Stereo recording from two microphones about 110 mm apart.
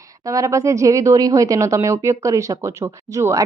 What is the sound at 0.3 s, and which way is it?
Speech, 30° right (ahead or behind).